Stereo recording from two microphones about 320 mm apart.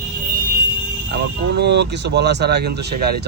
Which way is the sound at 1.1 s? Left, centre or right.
Right.